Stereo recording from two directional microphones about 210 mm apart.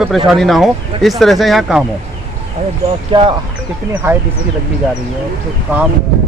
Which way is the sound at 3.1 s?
25° right (ahead or behind).